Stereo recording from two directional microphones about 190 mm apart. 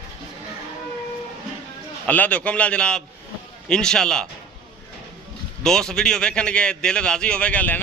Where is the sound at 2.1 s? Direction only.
5° left (ahead or behind).